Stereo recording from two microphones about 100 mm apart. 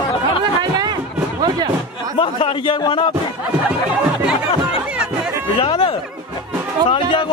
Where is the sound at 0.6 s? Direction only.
45° right (ahead or behind).